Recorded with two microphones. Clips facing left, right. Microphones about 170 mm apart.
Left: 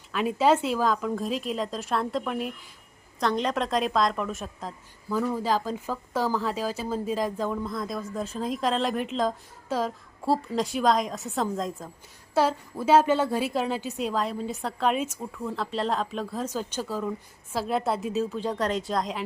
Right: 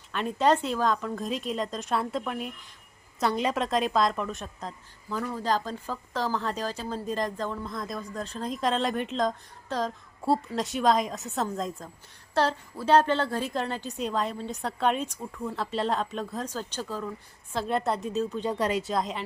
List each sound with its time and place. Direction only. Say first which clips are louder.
0.1 s a woman's voice: left 2 dB; 5° left (ahead or behind)